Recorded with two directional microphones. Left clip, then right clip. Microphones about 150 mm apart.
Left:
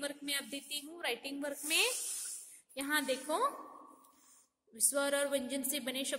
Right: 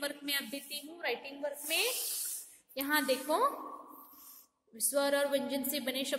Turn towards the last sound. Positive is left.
turn(degrees=20)  # may be behind; listen again after turning